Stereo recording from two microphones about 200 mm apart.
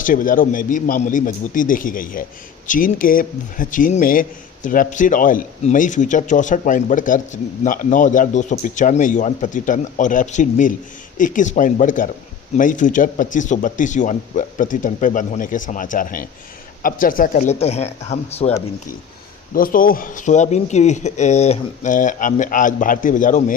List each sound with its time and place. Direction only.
0.0 s a man's voice: 40° left (ahead or behind)
19.5 s a man's voice: 45° left (ahead or behind)